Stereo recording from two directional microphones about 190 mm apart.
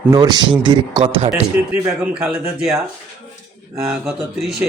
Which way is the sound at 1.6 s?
10° right (ahead or behind).